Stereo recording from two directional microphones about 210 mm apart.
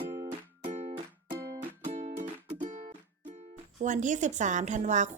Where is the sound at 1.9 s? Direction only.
35° right (ahead or behind).